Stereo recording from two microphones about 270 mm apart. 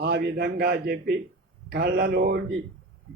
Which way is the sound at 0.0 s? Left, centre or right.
Right.